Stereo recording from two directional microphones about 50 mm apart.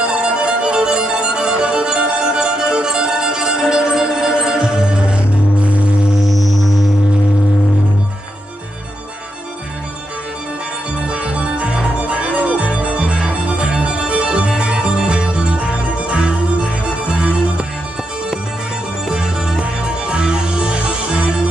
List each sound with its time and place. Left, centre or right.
0.0 s violin: centre
11.0 s music: right
19.0 s music: centre